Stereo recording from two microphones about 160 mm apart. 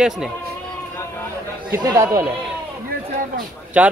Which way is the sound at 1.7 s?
20° right (ahead or behind).